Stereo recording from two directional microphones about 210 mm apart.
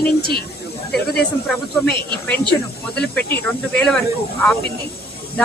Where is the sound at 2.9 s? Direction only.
5° left (ahead or behind).